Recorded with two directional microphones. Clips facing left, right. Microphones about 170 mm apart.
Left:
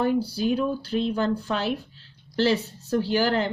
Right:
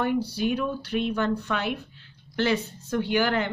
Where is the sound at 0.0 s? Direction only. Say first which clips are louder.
Left 2 dB; 30° left (ahead or behind).